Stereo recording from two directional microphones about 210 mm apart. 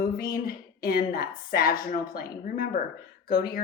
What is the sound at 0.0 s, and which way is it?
A woman's voice, 40° left (ahead or behind).